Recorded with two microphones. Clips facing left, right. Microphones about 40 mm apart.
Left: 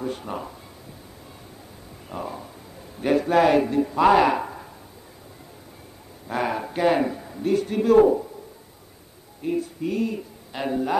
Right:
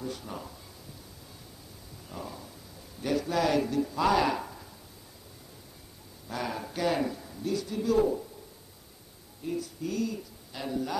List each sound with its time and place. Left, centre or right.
0.0 s speech: left
2.0 s a sound: left
3.0 s speech: left
6.2 s speech: left
9.4 s speech: left